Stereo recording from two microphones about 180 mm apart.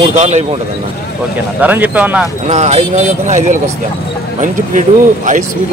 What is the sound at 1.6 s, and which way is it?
Speech, 10° right (ahead or behind).